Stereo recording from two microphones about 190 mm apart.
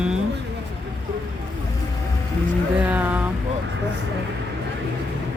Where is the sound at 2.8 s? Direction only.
10° right (ahead or behind).